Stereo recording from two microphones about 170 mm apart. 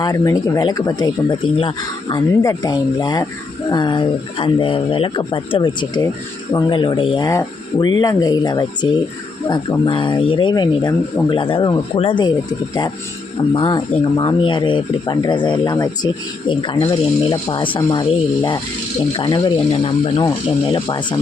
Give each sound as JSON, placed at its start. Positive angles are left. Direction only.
{"t": 0.0, "sound": "speech", "side_deg": 20}
{"t": 13.5, "sound": "speech", "side_deg": 25}